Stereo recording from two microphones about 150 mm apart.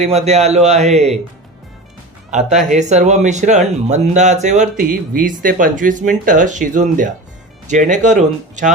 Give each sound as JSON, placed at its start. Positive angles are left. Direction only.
{"t": 0.0, "sound": "speech", "side_deg": -45}
{"t": 2.3, "sound": "speech", "side_deg": -50}